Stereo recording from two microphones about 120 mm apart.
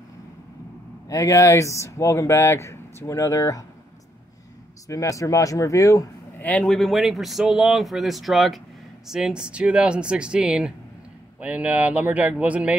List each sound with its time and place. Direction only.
1.0 s speech: 25° left (ahead or behind)
4.8 s speech: 25° left (ahead or behind)
6.4 s speech: 10° left (ahead or behind); by 12.7 s 10° right (ahead or behind)